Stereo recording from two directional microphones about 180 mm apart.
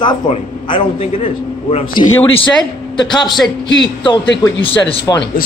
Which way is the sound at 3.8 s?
25° left (ahead or behind).